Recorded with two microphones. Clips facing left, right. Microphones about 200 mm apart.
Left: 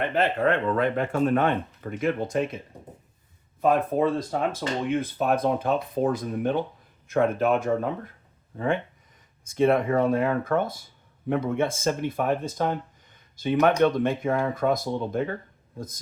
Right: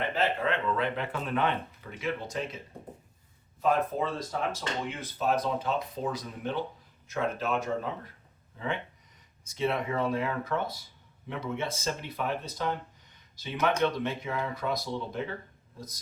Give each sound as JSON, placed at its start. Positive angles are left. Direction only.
{"t": 0.1, "sound": "speech", "side_deg": 55}
{"t": 3.6, "sound": "speech", "side_deg": 55}